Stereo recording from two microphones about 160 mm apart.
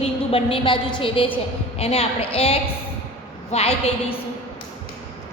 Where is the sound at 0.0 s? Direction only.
35° left (ahead or behind).